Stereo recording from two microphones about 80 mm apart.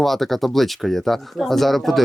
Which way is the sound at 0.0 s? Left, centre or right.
Centre.